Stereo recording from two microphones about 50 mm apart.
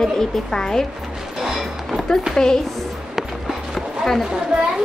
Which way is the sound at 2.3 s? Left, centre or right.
Centre.